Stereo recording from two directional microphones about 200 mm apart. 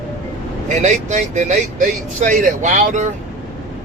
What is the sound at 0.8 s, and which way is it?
Speech, 35° right (ahead or behind).